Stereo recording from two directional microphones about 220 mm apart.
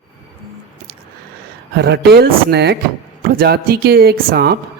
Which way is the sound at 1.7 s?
45° right (ahead or behind).